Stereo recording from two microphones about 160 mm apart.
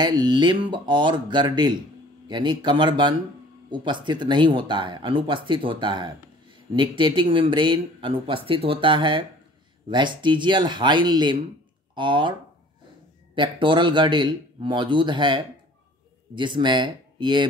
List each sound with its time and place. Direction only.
0.0 s speech: 25° right (ahead or behind)